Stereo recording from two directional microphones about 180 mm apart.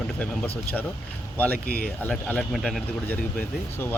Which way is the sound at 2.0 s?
10° left (ahead or behind).